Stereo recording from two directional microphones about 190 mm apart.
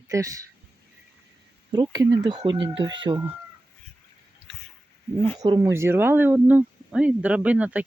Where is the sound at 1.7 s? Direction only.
20° right (ahead or behind).